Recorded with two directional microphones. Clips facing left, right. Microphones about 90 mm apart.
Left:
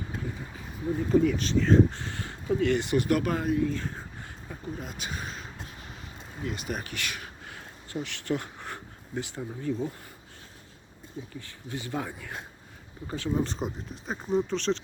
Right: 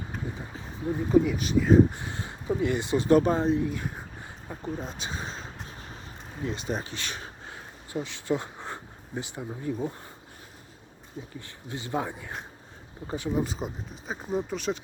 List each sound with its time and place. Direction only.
1.1 s speech: 10° right (ahead or behind); by 3.7 s 25° right (ahead or behind)
3.7 s speech: 15° right (ahead or behind)
4.4 s speech: 30° right (ahead or behind)
11.3 s speech: 20° right (ahead or behind)